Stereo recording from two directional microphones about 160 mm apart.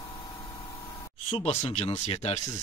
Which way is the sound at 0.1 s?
20° left (ahead or behind).